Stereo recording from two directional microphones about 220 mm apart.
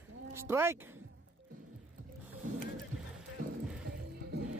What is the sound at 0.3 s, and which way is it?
Speech, 10° right (ahead or behind).